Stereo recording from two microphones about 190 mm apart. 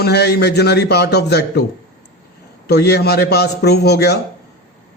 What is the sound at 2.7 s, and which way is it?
A man's voice, 60° left (ahead or behind).